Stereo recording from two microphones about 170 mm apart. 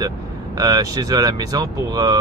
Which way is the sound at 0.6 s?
20° right (ahead or behind).